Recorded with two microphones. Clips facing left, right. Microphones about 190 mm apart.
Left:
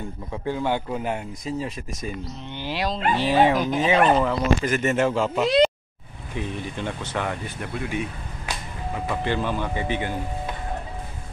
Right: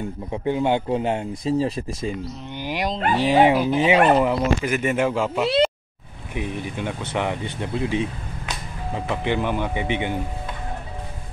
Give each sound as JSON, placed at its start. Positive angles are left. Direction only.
{"t": 0.3, "sound": "speech", "side_deg": -20}
{"t": 2.5, "sound": "speech", "side_deg": -15}